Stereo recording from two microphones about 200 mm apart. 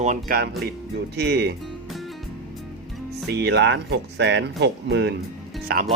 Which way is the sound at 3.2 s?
55° right (ahead or behind).